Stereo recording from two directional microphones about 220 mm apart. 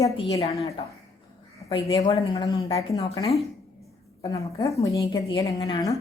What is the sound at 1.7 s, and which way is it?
A woman's voice, 20° left (ahead or behind).